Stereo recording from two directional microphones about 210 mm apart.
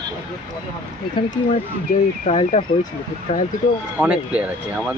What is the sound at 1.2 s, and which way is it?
Speech, 35° left (ahead or behind).